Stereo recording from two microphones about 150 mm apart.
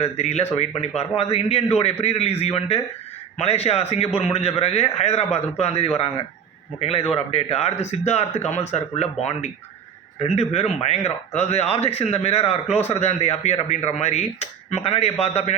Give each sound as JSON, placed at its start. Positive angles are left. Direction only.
{"t": 0.0, "sound": "a man's voice", "side_deg": 45}